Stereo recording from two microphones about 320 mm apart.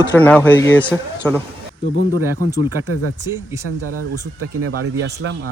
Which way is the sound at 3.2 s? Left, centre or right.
Centre.